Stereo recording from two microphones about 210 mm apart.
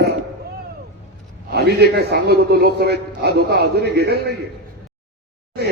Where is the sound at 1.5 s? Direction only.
50° right (ahead or behind).